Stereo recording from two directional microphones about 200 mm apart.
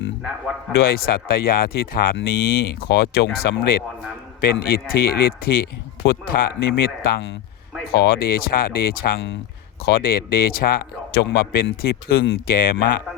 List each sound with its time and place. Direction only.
0.9 s speech: 50° left (ahead or behind)